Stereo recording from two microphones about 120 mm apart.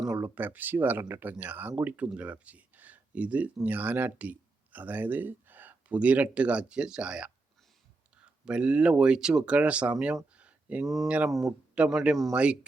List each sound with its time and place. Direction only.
0.2 s speech: 15° right (ahead or behind)
10.3 s a sound: 10° right (ahead or behind)
10.8 s speech: centre (ahead or behind)